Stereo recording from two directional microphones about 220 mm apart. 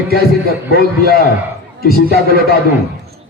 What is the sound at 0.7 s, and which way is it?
A man's voice, 45° left (ahead or behind).